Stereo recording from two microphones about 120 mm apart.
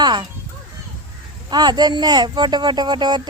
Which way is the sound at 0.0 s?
35° right (ahead or behind).